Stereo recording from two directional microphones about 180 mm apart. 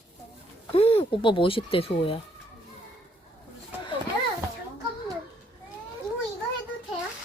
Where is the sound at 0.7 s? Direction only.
30° left (ahead or behind).